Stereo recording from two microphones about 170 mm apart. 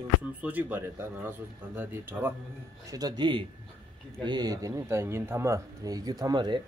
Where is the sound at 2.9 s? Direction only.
25° right (ahead or behind).